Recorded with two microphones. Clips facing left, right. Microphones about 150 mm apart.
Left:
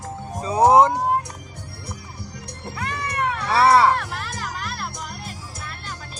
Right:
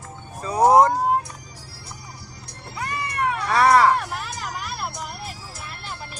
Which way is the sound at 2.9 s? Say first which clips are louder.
Right 1 dB; 60° left (ahead or behind).